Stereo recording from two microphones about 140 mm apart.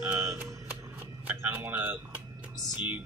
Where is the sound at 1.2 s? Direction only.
10° right (ahead or behind).